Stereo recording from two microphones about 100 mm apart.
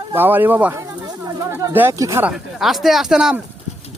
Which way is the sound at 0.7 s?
30° right (ahead or behind).